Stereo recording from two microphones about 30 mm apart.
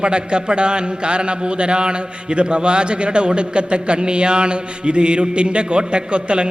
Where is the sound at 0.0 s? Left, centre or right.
Right.